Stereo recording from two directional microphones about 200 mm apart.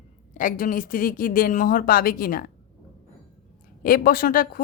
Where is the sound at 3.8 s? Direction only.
45° left (ahead or behind).